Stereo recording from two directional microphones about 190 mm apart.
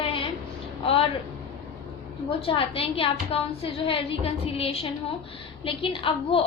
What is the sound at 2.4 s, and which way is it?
A woman's voice, 30° left (ahead or behind).